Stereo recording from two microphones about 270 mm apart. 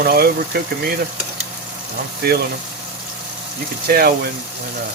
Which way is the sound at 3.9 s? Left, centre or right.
Right.